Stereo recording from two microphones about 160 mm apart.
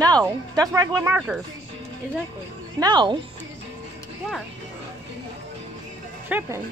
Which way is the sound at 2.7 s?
30° right (ahead or behind).